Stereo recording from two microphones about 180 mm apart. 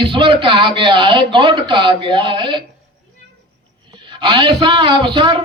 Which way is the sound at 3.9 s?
25° right (ahead or behind).